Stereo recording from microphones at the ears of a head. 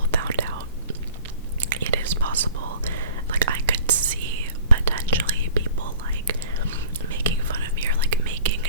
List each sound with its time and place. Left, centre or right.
0.1 s whispering: right
1.7 s whispering: right